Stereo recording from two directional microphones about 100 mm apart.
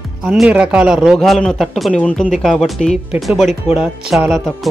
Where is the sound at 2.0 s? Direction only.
15° left (ahead or behind).